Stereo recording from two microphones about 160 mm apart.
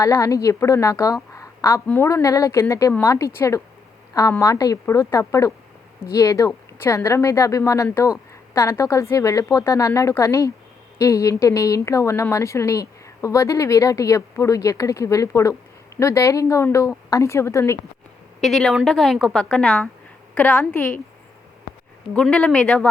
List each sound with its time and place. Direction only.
0.0 s a woman's voice: 20° left (ahead or behind)
18.3 s a woman's voice: centre (ahead or behind)
22.1 s a woman's voice: 5° left (ahead or behind)